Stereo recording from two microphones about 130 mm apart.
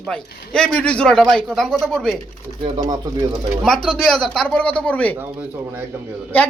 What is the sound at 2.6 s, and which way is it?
Speech, 35° right (ahead or behind).